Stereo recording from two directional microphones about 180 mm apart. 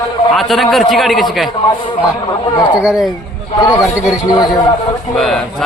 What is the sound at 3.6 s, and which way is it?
Speech, 20° left (ahead or behind).